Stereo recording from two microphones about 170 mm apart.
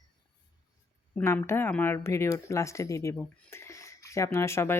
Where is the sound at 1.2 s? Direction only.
15° left (ahead or behind).